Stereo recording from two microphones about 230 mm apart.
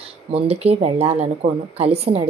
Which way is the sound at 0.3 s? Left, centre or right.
Right.